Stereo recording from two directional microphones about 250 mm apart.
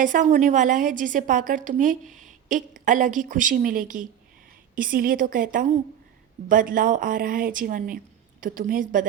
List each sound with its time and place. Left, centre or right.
0.0 s a woman's voice: right